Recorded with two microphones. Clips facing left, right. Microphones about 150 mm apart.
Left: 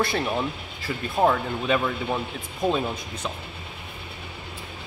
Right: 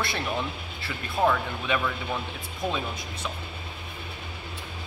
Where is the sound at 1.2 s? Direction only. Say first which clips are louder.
Left 3 dB; 30° left (ahead or behind).